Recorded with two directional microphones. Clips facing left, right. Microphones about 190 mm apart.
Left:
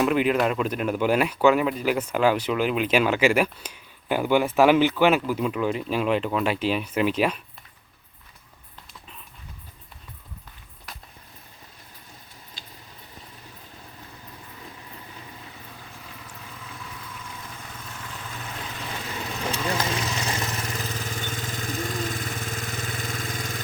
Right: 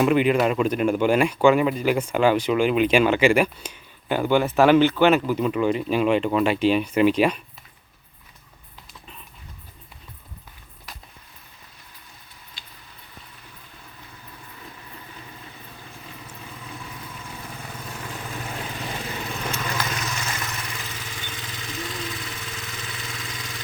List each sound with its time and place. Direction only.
0.0 s speech: centre (ahead or behind)
12.6 s a sound: 45° left (ahead or behind)
19.5 s vehicle: 30° left (ahead or behind); by 23.6 s 50° left (ahead or behind)